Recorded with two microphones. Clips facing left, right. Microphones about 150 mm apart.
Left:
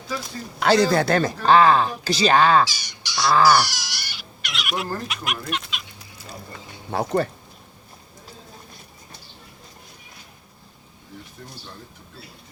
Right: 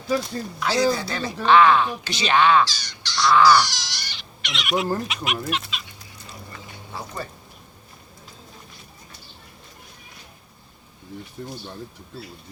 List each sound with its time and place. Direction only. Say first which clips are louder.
0.6 s speech: left 4 dB; 60° left (ahead or behind); by 2.6 s 40° left (ahead or behind)
2.6 s goose: right 1 dB; 10° left (ahead or behind)
3.2 s speech: right 1 dB; 35° left (ahead or behind)
3.6 s cat: even; 10° left (ahead or behind)
5.0 s chicken: right 2 dB; centre (ahead or behind)
6.9 s speech: left 12 dB; 60° left (ahead or behind)